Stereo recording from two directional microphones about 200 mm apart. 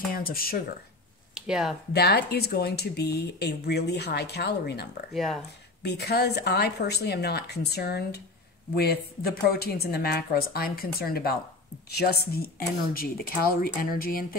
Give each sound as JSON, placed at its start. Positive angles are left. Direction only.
{"t": 0.1, "sound": "speech", "side_deg": 45}
{"t": 1.3, "sound": "speech", "side_deg": -5}
{"t": 2.0, "sound": "speech", "side_deg": 55}
{"t": 5.1, "sound": "speech", "side_deg": 0}
{"t": 5.8, "sound": "a woman's voice", "side_deg": 55}